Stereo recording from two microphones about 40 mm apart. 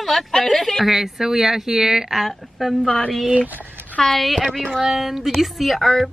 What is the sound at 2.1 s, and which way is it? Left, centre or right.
Speech, centre.